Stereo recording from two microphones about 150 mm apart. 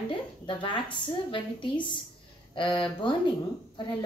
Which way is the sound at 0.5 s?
35° left (ahead or behind).